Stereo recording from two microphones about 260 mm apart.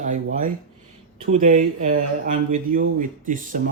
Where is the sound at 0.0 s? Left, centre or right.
Right.